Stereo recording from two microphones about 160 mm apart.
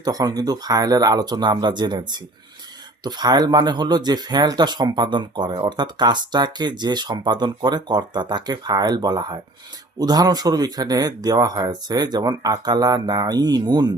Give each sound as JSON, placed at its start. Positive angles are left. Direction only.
{"t": 0.0, "sound": "speech", "side_deg": -25}